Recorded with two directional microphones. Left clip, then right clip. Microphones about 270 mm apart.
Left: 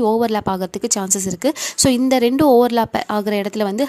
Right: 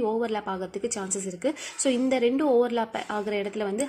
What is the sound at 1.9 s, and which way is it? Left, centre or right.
A woman's voice, left.